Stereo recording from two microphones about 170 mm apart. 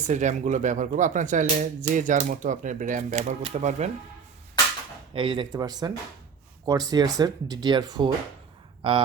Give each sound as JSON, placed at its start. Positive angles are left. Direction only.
{"t": 0.0, "sound": "speech", "side_deg": -45}
{"t": 3.1, "sound": "speech", "side_deg": -35}
{"t": 5.1, "sound": "speech", "side_deg": -30}